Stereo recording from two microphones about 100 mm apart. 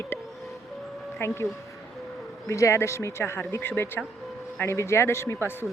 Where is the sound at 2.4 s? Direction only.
30° left (ahead or behind).